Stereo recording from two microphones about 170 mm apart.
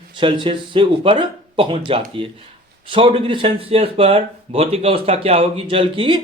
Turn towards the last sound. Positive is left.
turn(degrees=-30)  # may be behind; listen again after turning